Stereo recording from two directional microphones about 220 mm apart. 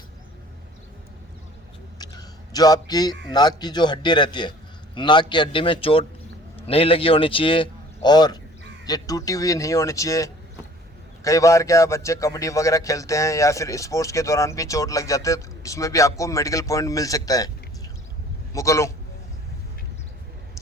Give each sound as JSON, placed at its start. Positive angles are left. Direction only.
{"t": 2.0, "sound": "a sound", "side_deg": 15}
{"t": 3.2, "sound": "a man's voice", "side_deg": 20}
{"t": 18.5, "sound": "a man's voice", "side_deg": 15}